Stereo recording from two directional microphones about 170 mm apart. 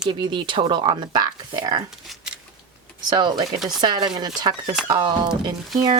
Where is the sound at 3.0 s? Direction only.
25° right (ahead or behind).